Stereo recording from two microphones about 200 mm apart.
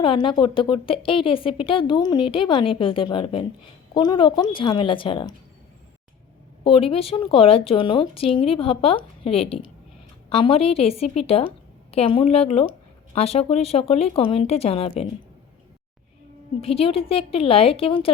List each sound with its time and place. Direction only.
0.0 s a woman's voice: 25° left (ahead or behind)
6.7 s a woman's voice: 30° left (ahead or behind)
16.6 s a woman's voice: 30° left (ahead or behind)